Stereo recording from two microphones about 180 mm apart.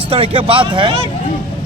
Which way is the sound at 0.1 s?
30° right (ahead or behind).